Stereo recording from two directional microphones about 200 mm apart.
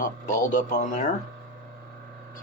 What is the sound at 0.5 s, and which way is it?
Speech, 40° left (ahead or behind).